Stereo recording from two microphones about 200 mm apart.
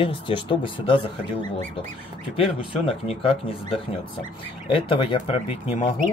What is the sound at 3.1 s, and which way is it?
Speech, 30° left (ahead or behind).